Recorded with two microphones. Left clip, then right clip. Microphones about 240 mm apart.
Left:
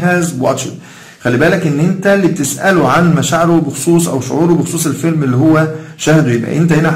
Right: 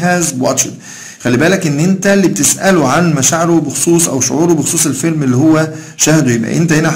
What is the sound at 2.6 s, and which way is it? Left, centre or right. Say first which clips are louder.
Speech: left 2 dB; right.